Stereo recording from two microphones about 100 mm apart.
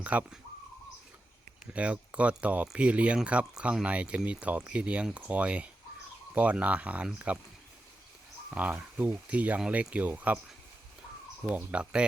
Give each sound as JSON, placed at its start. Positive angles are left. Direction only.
{"t": 0.0, "sound": "speech", "side_deg": -15}
{"t": 1.6, "sound": "speech", "side_deg": -10}
{"t": 8.4, "sound": "speech", "side_deg": -15}
{"t": 11.4, "sound": "speech", "side_deg": -10}